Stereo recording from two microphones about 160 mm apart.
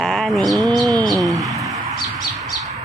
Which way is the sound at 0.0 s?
Centre (ahead or behind).